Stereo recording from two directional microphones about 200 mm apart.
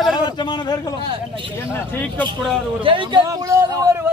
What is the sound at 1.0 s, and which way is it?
Speech, 25° right (ahead or behind).